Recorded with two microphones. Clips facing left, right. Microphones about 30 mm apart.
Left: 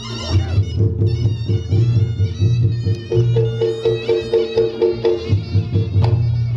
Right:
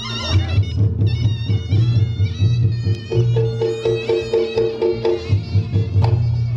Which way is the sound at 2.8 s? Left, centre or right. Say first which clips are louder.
Left 4 dB; centre.